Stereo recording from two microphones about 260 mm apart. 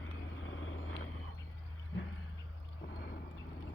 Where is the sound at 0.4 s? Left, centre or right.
Left.